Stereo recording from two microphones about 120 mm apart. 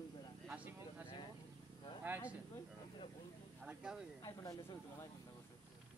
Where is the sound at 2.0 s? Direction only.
15° right (ahead or behind).